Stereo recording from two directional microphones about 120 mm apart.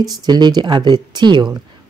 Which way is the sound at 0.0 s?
35° right (ahead or behind).